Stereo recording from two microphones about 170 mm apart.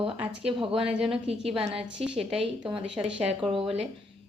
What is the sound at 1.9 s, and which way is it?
Speech, 5° right (ahead or behind).